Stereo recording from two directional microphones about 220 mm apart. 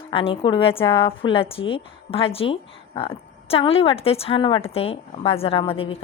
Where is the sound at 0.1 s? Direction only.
25° left (ahead or behind).